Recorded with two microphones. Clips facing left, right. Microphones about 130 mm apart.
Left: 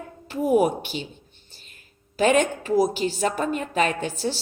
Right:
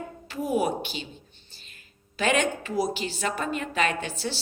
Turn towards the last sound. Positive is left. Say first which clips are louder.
# left 4 dB
turn(degrees=45)  # may be behind; listen again after turning